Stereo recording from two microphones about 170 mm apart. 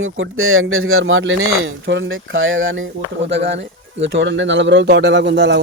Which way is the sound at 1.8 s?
90° right.